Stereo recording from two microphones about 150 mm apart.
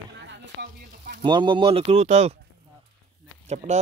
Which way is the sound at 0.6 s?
90° right.